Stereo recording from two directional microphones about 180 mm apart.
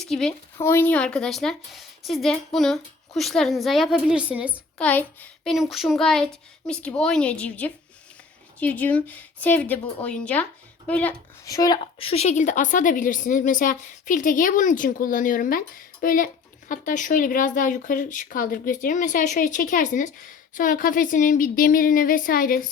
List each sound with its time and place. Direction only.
0.0 s speech: 5° left (ahead or behind)
0.6 s a woman's voice: 15° left (ahead or behind); by 4.6 s 5° right (ahead or behind)
4.8 s a woman's voice: 10° left (ahead or behind)
11.4 s speech: 20° left (ahead or behind)
11.9 s a woman's voice: 35° left (ahead or behind); by 22.7 s 50° left (ahead or behind)